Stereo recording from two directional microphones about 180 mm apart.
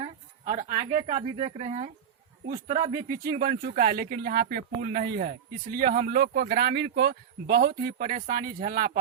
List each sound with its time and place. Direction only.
0.4 s speech: 35° right (ahead or behind)
3.2 s speech: 50° right (ahead or behind)
5.2 s speech: 50° right (ahead or behind)